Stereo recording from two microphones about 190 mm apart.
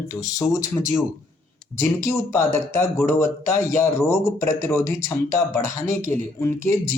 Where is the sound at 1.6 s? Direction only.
15° left (ahead or behind).